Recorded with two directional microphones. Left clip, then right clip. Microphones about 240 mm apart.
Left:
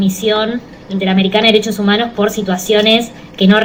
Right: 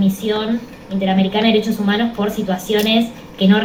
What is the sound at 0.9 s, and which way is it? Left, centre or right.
Speech, left.